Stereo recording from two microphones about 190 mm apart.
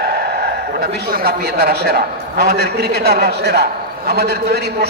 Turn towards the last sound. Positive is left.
turn(degrees=-55)  # may be behind; listen again after turning